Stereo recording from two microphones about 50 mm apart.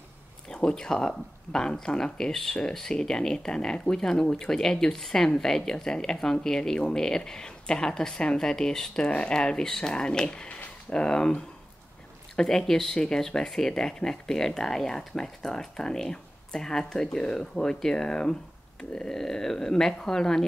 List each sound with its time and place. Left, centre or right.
0.5 s speech: centre